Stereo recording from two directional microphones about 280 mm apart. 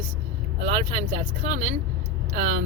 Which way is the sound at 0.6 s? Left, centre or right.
Right.